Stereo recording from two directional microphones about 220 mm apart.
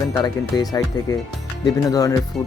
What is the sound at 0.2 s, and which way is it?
Speech, 15° left (ahead or behind).